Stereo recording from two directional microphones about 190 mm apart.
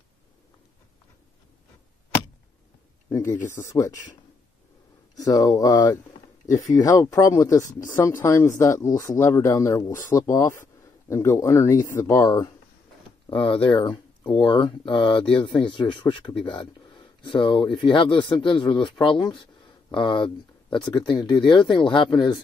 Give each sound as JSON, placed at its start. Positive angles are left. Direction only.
{"t": 3.4, "sound": "speech", "side_deg": 15}
{"t": 5.1, "sound": "speech", "side_deg": 20}